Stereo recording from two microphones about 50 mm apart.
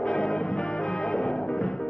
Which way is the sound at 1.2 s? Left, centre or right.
Centre.